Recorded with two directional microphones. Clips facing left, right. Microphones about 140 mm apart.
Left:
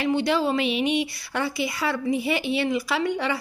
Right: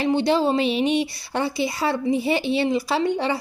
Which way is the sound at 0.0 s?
30° right (ahead or behind).